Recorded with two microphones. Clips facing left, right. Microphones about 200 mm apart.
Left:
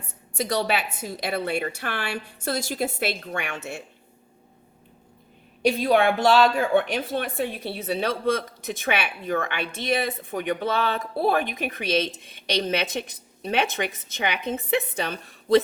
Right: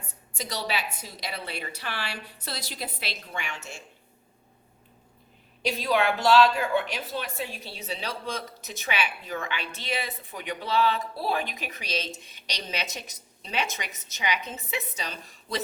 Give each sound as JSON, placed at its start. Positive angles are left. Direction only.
{"t": 0.3, "sound": "a woman's voice", "side_deg": 55}
{"t": 5.6, "sound": "speech", "side_deg": 55}